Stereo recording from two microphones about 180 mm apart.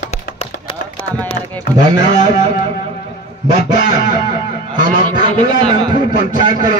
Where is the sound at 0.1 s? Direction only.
35° left (ahead or behind).